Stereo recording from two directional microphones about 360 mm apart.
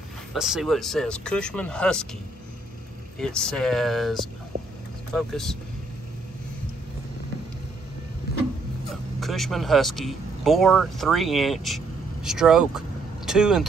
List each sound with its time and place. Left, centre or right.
0.3 s speech: centre
3.2 s speech: centre
9.2 s speech: centre